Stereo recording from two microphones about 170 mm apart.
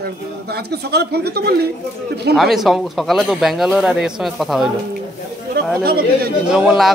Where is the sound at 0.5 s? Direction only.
70° right (ahead or behind).